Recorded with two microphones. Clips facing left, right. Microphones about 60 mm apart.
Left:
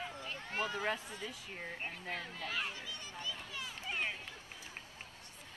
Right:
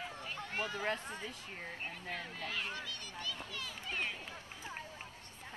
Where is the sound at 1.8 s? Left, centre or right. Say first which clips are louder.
Even; centre.